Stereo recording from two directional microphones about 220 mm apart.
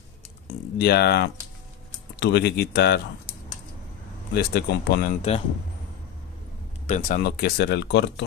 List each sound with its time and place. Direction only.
0.7 s speech: 45° left (ahead or behind)
4.3 s speech: 45° left (ahead or behind)
6.9 s speech: 40° left (ahead or behind)